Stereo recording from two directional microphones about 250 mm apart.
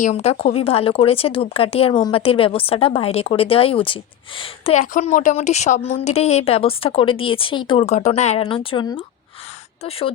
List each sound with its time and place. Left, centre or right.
0.0 s speech: left